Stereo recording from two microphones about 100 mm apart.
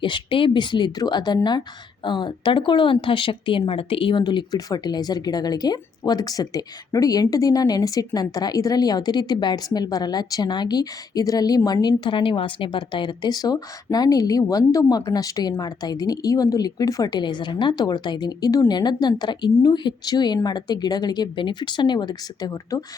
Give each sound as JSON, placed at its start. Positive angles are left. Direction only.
{"t": 0.0, "sound": "a woman's voice", "side_deg": 55}
{"t": 4.2, "sound": "a woman's voice", "side_deg": 45}